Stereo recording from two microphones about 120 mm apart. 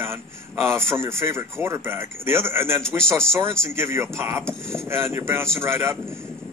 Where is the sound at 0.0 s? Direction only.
20° right (ahead or behind).